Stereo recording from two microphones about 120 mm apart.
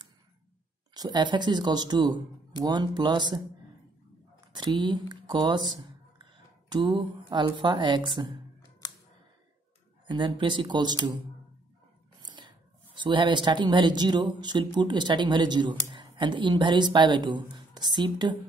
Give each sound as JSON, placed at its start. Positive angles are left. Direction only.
{"t": 0.9, "sound": "speech", "side_deg": -35}
{"t": 4.5, "sound": "speech", "side_deg": -40}
{"t": 10.0, "sound": "speech", "side_deg": -40}
{"t": 12.2, "sound": "whispering", "side_deg": -35}
{"t": 12.9, "sound": "speech", "side_deg": -40}